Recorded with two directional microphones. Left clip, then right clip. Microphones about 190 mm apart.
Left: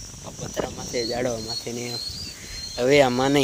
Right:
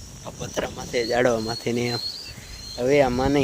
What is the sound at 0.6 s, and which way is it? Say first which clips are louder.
Speech: right 1 dB; 25° right (ahead or behind).